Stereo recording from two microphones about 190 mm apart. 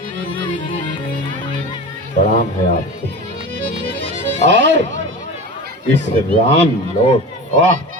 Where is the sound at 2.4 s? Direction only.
50° left (ahead or behind).